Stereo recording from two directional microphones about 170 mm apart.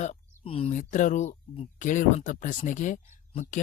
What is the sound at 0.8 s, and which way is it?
Speech, 45° left (ahead or behind).